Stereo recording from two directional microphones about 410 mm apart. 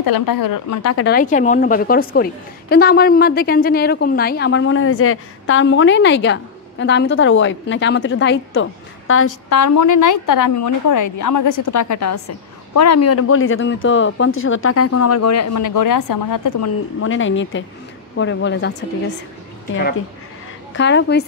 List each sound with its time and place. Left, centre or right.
0.0 s a woman's voice: left
1.1 s a woman's voice: centre
20.7 s a woman's voice: left